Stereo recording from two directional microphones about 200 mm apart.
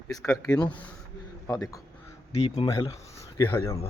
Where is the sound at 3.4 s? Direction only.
10° left (ahead or behind).